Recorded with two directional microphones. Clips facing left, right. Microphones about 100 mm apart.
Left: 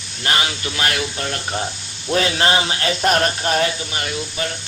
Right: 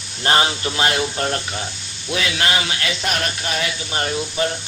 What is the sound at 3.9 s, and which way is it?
Speech, 35° right (ahead or behind).